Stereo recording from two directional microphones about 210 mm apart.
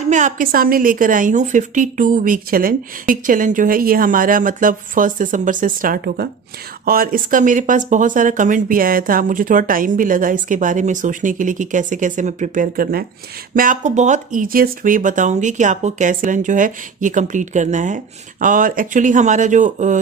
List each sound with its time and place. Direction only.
0.1 s speech: 40° right (ahead or behind)